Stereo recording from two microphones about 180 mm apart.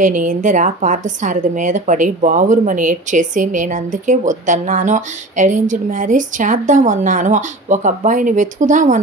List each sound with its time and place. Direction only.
0.0 s a woman's voice: 45° right (ahead or behind)